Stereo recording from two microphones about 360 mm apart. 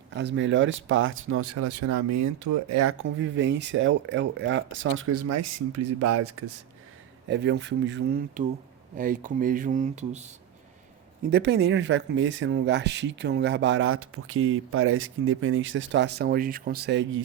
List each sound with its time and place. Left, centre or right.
0.1 s speech: right
11.3 s speech: right